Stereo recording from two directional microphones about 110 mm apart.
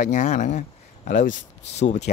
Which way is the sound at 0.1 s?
90° left.